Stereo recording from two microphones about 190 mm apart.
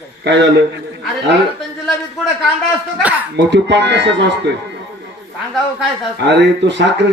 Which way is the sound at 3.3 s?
65° right (ahead or behind).